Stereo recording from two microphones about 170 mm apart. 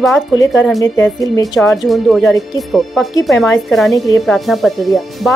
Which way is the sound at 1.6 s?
Centre (ahead or behind).